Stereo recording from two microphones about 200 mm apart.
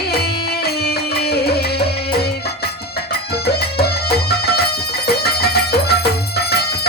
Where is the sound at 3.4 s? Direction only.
55° left (ahead or behind).